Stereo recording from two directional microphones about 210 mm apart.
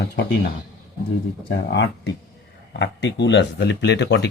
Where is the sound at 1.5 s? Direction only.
55° left (ahead or behind).